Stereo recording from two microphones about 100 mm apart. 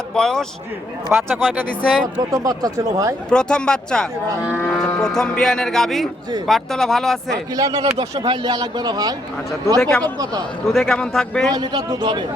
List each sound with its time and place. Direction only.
0.1 s speech: 5° left (ahead or behind)
2.3 s speech: 40° right (ahead or behind)
3.2 s speech: 10° left (ahead or behind)
7.5 s speech: 35° right (ahead or behind)
8.1 s speech: 75° right (ahead or behind)
8.4 s a man's voice: 50° right (ahead or behind)
9.7 s speech: 5° left (ahead or behind)
10.0 s speech: 40° right (ahead or behind)
10.7 s speech: centre (ahead or behind)
11.5 s a man's voice: 45° right (ahead or behind)